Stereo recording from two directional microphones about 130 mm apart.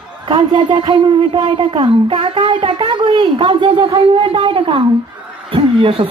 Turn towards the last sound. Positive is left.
turn(degrees=-45)  # may be behind; listen again after turning